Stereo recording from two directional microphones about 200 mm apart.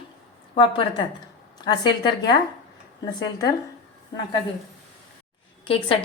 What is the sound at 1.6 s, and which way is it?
A woman's voice, 20° left (ahead or behind).